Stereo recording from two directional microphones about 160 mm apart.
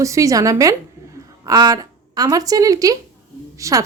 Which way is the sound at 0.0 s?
20° right (ahead or behind).